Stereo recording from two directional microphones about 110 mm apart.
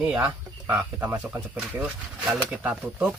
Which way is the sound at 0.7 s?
15° right (ahead or behind).